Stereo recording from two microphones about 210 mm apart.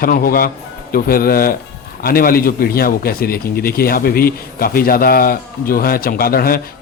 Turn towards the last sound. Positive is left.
turn(degrees=45)  # may be behind; listen again after turning